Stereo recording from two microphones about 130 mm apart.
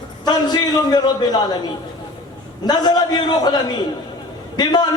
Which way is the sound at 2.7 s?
30° left (ahead or behind).